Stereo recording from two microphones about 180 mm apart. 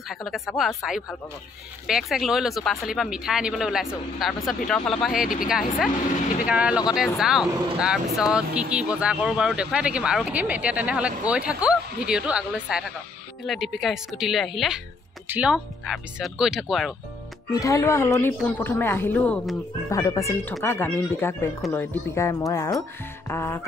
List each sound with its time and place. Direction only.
0.1 s speech: centre (ahead or behind)
5.2 s speech: 50° left (ahead or behind)
5.5 s speech: 5° right (ahead or behind)
17.5 s speech: 20° left (ahead or behind)
19.9 s speech: 20° left (ahead or behind)